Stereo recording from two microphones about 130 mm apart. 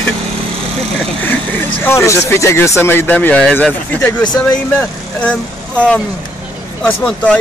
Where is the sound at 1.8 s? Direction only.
20° left (ahead or behind).